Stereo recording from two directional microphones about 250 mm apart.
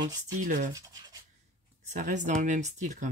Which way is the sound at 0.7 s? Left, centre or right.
Centre.